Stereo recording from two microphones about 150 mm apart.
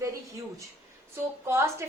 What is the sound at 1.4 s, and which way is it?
Speech, 15° right (ahead or behind).